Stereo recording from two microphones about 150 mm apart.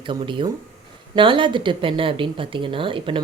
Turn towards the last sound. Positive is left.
turn(degrees=-35)  # may be behind; listen again after turning